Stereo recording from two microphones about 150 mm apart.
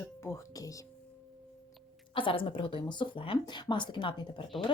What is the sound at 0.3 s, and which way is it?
Speech, 20° left (ahead or behind).